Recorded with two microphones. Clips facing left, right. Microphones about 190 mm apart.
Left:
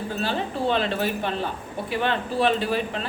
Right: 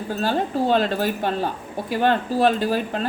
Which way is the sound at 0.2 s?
45° right (ahead or behind).